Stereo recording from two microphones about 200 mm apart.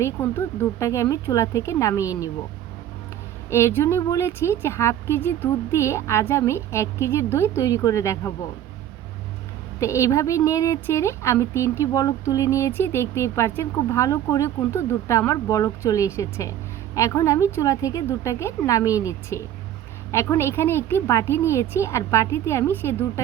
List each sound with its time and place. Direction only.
0.0 s a woman's voice: 10° left (ahead or behind)
3.5 s a woman's voice: 10° left (ahead or behind)
9.8 s a woman's voice: 15° left (ahead or behind)